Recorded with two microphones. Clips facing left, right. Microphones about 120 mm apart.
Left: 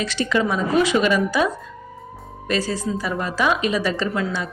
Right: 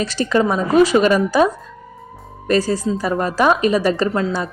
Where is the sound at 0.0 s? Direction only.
40° right (ahead or behind).